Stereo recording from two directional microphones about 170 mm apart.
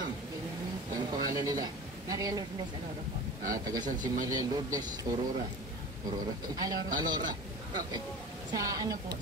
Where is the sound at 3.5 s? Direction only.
20° right (ahead or behind).